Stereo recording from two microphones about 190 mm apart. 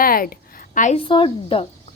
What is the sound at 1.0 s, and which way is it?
Speech, 25° left (ahead or behind).